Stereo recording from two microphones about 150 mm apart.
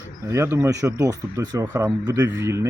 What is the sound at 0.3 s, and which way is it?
Speech, 20° right (ahead or behind).